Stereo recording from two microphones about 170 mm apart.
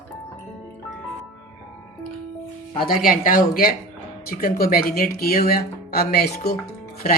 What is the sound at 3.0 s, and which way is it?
Speech, 55° left (ahead or behind).